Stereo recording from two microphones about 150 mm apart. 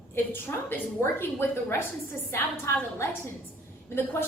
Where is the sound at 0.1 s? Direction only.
15° left (ahead or behind).